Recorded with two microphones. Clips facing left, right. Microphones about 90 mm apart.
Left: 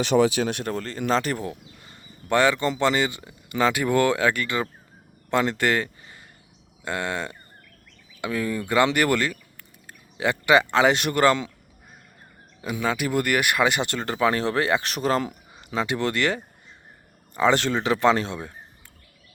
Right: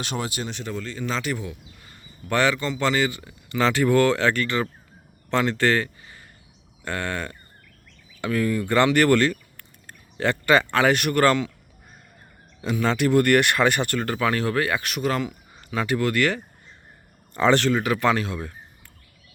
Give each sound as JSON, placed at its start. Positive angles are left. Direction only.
{"t": 0.4, "sound": "speech", "side_deg": 55}
{"t": 1.8, "sound": "a sound", "side_deg": 25}
{"t": 2.7, "sound": "speech", "side_deg": 25}
{"t": 12.8, "sound": "speech", "side_deg": 10}
{"t": 17.3, "sound": "speech", "side_deg": 10}
{"t": 17.6, "sound": "speech", "side_deg": 25}